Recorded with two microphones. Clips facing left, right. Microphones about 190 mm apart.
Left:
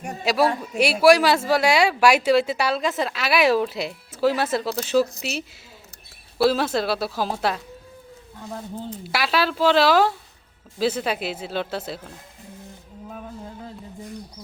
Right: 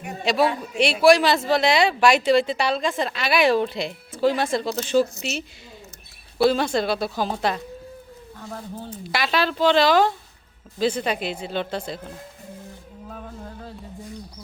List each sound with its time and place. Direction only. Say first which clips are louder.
0.3 s a woman's voice: even; 5° left (ahead or behind)
6.4 s a woman's voice: right 1 dB; 5° left (ahead or behind)
8.4 s a woman's voice: left 2 dB; 20° left (ahead or behind)
9.1 s a woman's voice: even; 5° left (ahead or behind)